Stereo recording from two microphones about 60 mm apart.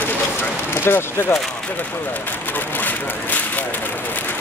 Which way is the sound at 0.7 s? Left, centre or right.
Left.